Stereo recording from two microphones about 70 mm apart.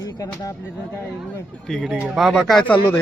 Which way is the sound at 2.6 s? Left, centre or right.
Left.